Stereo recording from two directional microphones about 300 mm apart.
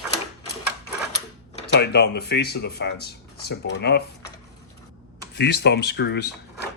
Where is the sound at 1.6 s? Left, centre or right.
Left.